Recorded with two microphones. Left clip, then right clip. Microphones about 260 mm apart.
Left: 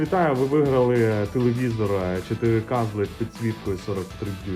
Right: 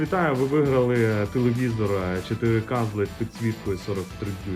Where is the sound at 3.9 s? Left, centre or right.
Centre.